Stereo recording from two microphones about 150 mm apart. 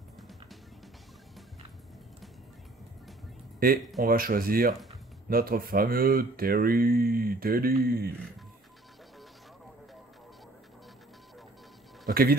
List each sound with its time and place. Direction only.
3.5 s speech: 80° right
12.1 s speech: 85° right